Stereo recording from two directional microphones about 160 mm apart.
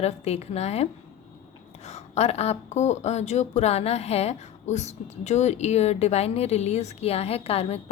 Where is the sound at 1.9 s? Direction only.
40° left (ahead or behind).